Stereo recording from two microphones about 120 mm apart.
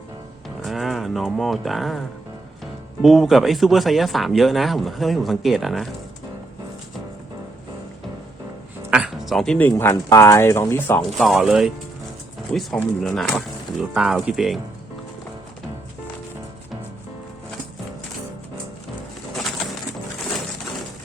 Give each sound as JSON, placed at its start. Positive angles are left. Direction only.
{"t": 0.4, "sound": "speech", "side_deg": 0}
{"t": 8.9, "sound": "music", "side_deg": -5}
{"t": 9.6, "sound": "speech", "side_deg": 20}
{"t": 11.2, "sound": "speech", "side_deg": 0}
{"t": 19.3, "sound": "bird", "side_deg": 0}